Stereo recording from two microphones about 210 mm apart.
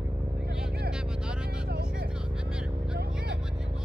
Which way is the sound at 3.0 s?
50° right (ahead or behind).